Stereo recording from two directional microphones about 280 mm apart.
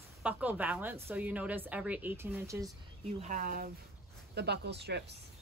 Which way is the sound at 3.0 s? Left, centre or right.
Right.